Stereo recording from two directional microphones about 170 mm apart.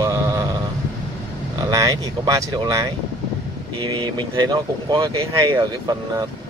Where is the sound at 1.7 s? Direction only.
20° right (ahead or behind).